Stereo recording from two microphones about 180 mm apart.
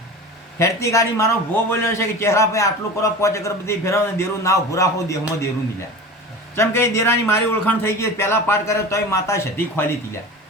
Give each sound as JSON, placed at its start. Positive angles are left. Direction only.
{"t": 0.6, "sound": "a man's voice", "side_deg": 15}
{"t": 6.6, "sound": "a man's voice", "side_deg": 15}